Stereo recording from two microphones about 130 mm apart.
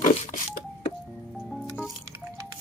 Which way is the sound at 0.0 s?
75° left (ahead or behind).